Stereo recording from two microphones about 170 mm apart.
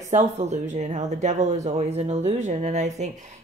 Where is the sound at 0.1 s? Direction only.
45° right (ahead or behind).